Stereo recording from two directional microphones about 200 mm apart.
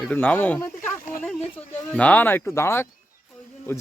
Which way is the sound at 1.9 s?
5° left (ahead or behind).